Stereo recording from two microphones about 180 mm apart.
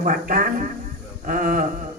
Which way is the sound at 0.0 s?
50° right (ahead or behind).